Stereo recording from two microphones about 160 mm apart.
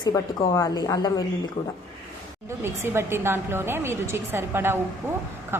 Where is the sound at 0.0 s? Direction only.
20° left (ahead or behind).